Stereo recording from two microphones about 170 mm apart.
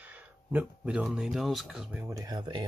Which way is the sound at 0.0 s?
10° right (ahead or behind).